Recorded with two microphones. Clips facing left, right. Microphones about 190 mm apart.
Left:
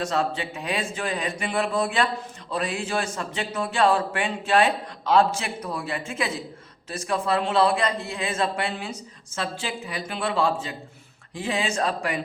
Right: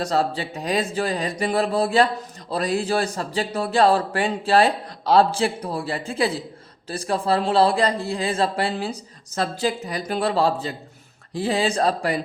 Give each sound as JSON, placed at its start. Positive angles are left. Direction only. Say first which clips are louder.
{"t": 0.0, "sound": "speech", "louder": "right 3 dB", "side_deg": -35}